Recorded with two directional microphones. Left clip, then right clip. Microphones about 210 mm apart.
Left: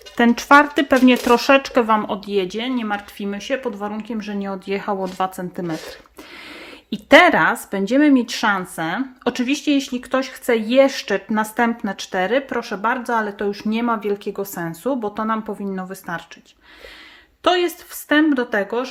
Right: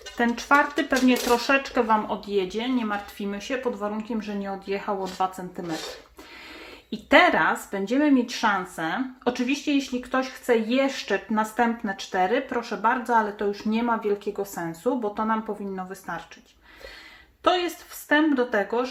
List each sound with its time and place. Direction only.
0.2 s speech: 55° left (ahead or behind)
6.9 s speech: 50° left (ahead or behind)
17.4 s speech: 50° left (ahead or behind)